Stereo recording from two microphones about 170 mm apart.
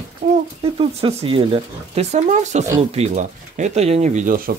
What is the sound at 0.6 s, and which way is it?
Speech, 35° right (ahead or behind).